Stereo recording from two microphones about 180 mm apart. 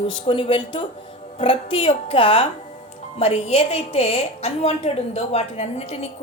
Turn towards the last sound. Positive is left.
turn(degrees=35)  # may be behind; listen again after turning